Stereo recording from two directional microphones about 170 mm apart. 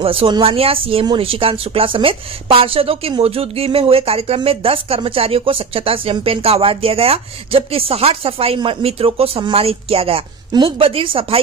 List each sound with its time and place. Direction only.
0.0 s speech: 35° right (ahead or behind)